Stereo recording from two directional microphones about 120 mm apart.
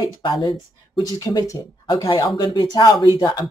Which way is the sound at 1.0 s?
30° left (ahead or behind).